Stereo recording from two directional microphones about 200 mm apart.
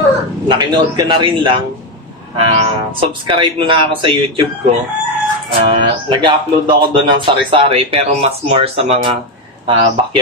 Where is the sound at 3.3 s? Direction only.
25° right (ahead or behind).